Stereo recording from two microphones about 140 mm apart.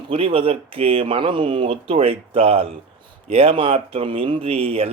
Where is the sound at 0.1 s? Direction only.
40° right (ahead or behind).